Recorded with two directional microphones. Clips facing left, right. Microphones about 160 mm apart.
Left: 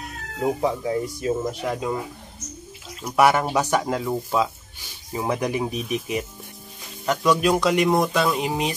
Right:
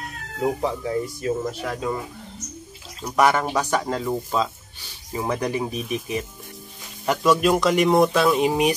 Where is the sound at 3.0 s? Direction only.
5° left (ahead or behind).